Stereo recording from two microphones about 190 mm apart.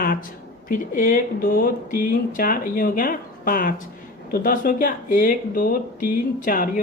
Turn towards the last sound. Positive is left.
turn(degrees=45)  # may be behind; listen again after turning